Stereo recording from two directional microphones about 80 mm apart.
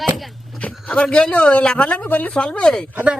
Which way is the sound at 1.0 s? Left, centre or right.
Centre.